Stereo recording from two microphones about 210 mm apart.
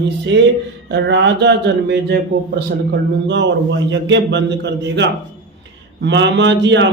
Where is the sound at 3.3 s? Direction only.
55° right (ahead or behind).